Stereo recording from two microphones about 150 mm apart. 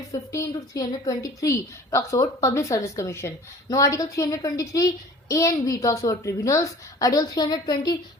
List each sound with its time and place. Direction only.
0.1 s a woman's voice: 20° left (ahead or behind)